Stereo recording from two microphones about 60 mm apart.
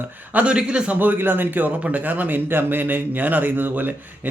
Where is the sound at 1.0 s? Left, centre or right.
Right.